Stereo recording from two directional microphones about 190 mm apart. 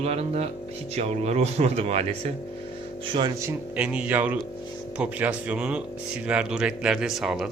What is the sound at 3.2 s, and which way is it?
Speech, 20° right (ahead or behind).